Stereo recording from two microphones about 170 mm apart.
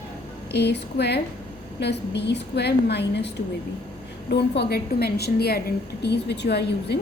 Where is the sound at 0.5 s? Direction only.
80° left.